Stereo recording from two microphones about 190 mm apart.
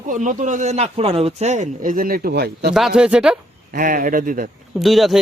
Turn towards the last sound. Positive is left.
turn(degrees=0)  # may be behind; listen again after turning